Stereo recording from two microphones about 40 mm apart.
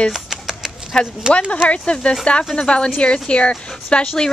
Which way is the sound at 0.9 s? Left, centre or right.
Centre.